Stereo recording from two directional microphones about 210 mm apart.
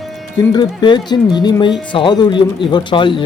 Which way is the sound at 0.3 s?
20° left (ahead or behind).